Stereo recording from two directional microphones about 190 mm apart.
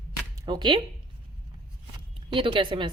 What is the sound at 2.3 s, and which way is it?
Speech, 25° right (ahead or behind).